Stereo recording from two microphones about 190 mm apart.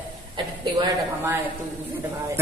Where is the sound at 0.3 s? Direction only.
25° right (ahead or behind).